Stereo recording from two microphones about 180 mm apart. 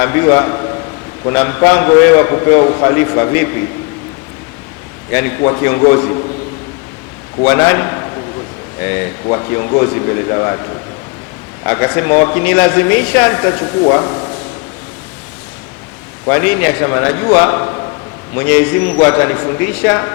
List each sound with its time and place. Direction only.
0.0 s a man's voice: 15° left (ahead or behind)
5.4 s speech: 20° left (ahead or behind)
7.4 s a man's voice: 15° left (ahead or behind)
11.6 s a man's voice: 15° left (ahead or behind)
16.3 s a man's voice: 10° left (ahead or behind)